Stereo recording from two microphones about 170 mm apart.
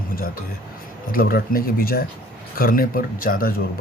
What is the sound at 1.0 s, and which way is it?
A man's voice, 60° left (ahead or behind).